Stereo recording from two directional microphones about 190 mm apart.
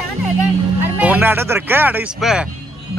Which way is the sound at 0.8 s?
10° right (ahead or behind).